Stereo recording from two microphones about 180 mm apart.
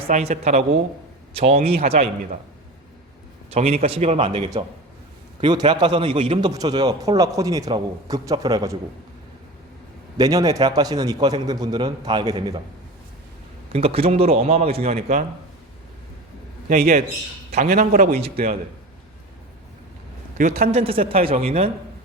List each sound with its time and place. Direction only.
0.0 s a man's voice: 35° right (ahead or behind)
3.5 s a man's voice: 35° right (ahead or behind); by 8.8 s 20° right (ahead or behind)
10.2 s a man's voice: 20° right (ahead or behind)
13.7 s a man's voice: 35° right (ahead or behind)
16.6 s a man's voice: 60° right (ahead or behind)
20.4 s a man's voice: 55° right (ahead or behind)
20.7 s a man's voice: 30° right (ahead or behind)